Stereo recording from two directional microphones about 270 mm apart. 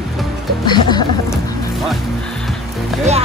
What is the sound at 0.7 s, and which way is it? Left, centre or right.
Music, centre.